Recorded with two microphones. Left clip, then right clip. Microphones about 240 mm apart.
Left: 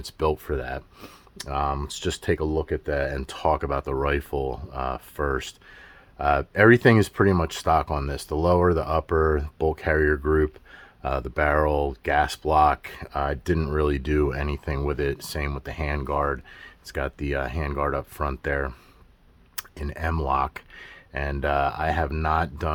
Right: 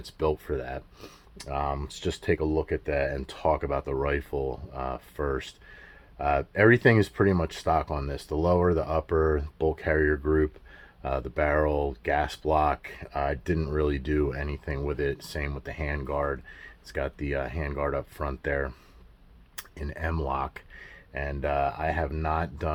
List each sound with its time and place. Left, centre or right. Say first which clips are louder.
0.0 s speech: left 3 dB; left